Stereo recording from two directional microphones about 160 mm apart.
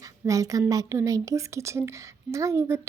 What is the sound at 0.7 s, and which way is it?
A woman's voice, 20° right (ahead or behind).